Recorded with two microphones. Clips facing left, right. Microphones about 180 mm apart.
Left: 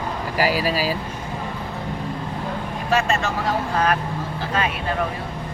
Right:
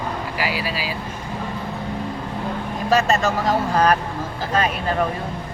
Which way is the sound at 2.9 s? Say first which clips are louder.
Right 3 dB; 40° right (ahead or behind).